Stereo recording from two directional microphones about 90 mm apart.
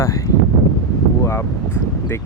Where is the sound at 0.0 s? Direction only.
35° left (ahead or behind).